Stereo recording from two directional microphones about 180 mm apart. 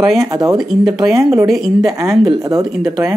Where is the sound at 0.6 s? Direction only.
Centre (ahead or behind).